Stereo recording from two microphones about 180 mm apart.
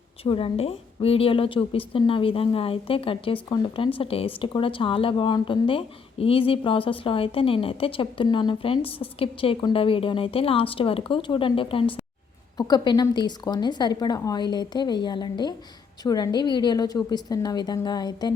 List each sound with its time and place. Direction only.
0.3 s a woman's voice: 30° left (ahead or behind)